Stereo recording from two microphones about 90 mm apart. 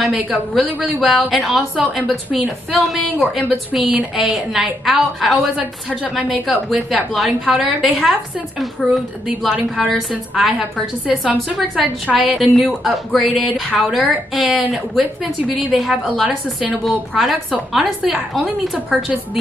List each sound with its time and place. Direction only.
0.0 s a woman's voice: centre (ahead or behind)
5.6 s a woman's voice: 15° right (ahead or behind)
6.1 s a woman's voice: centre (ahead or behind)
10.6 s a woman's voice: 15° right (ahead or behind)